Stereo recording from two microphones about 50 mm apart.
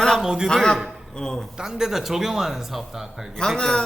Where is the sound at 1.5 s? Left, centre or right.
Centre.